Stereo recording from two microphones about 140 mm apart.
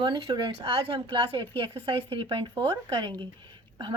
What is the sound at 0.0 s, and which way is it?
Speech, 35° right (ahead or behind).